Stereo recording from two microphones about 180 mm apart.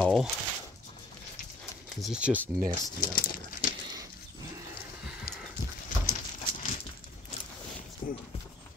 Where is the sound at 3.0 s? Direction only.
50° left (ahead or behind).